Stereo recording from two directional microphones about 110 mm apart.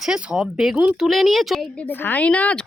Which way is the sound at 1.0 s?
Centre (ahead or behind).